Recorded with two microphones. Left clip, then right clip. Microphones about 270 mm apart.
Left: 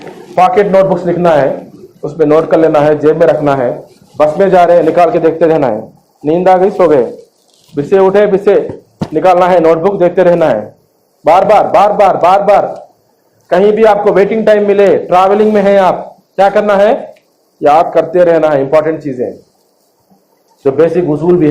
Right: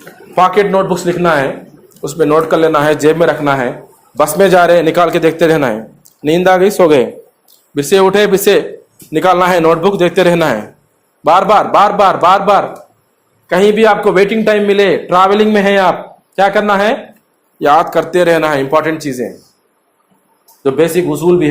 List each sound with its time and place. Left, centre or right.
0.3 s a man's voice: right
17.6 s a man's voice: right
20.7 s a man's voice: right